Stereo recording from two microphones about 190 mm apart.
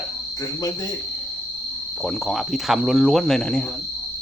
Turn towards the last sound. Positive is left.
turn(degrees=5)  # may be behind; listen again after turning